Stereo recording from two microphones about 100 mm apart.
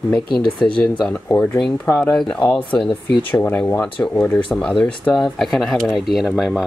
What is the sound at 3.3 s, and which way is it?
Speech, 20° left (ahead or behind).